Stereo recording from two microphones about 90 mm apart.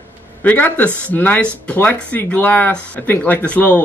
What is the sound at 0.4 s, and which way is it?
Speech, 20° left (ahead or behind).